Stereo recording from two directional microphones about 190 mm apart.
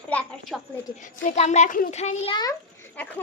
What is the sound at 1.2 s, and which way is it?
A child's voice, 40° left (ahead or behind).